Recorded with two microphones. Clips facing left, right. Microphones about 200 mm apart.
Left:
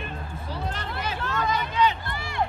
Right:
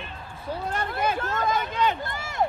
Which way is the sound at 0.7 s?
50° right (ahead or behind).